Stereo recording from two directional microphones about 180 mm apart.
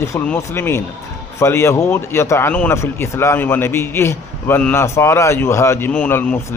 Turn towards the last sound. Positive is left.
turn(degrees=10)  # may be behind; listen again after turning